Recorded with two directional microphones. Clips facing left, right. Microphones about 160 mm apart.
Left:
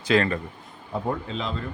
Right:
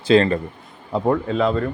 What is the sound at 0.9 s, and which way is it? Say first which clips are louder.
Speech: right 9 dB; 85° right.